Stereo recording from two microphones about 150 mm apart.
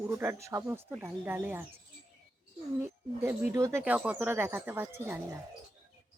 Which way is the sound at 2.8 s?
15° right (ahead or behind).